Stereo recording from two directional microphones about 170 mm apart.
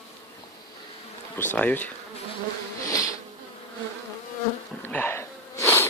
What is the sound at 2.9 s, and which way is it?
Insect, 20° left (ahead or behind).